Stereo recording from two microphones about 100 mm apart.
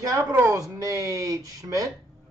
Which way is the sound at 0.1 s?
40° right (ahead or behind).